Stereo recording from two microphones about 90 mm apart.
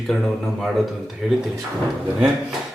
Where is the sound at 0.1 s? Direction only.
5° left (ahead or behind).